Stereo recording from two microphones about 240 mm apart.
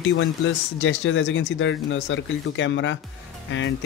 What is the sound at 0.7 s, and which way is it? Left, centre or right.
Speech, left.